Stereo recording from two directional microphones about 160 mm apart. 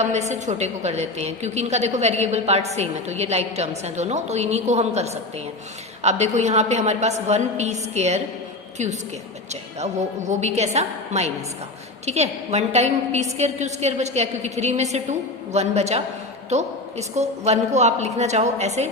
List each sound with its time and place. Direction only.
0.0 s a woman's voice: 45° right (ahead or behind)